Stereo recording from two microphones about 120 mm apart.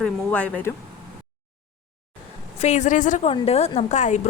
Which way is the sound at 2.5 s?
70° left (ahead or behind).